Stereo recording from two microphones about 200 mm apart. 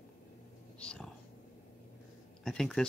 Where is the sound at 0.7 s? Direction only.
5° left (ahead or behind).